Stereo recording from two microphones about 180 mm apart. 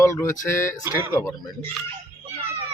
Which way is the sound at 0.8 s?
10° right (ahead or behind).